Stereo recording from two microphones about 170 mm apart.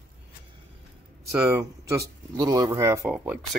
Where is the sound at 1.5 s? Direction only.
20° right (ahead or behind).